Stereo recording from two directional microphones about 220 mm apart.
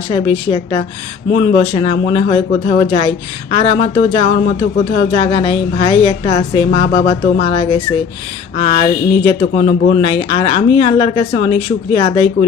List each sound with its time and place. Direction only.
0.1 s speech: 25° left (ahead or behind)